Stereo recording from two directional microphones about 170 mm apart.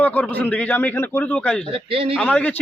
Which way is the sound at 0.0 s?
10° left (ahead or behind).